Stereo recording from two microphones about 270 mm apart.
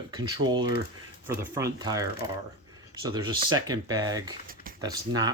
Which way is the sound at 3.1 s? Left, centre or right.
Centre.